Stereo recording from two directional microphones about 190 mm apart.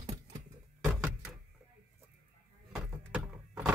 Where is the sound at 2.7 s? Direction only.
5° right (ahead or behind).